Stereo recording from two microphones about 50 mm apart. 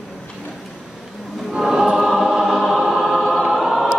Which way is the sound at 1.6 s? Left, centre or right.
Centre.